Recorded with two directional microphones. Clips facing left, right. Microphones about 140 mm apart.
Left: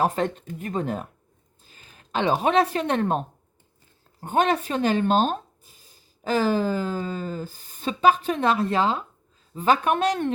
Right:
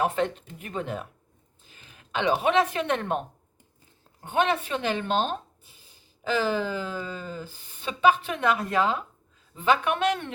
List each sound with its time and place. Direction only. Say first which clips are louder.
0.0 s speech: left 2 dB; 40° left (ahead or behind)
9.6 s speech: left 3 dB; 40° left (ahead or behind)